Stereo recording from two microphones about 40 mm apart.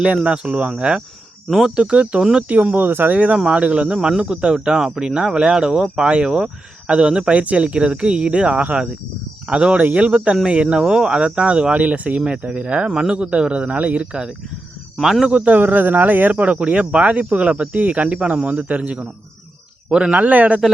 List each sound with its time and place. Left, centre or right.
0.3 s speech: right
2.5 s speech: right
3.3 s speech: right
7.3 s speech: right
12.9 s speech: centre
13.1 s speech: right
14.1 s speech: centre
15.4 s speech: right
16.3 s speech: right
20.1 s speech: right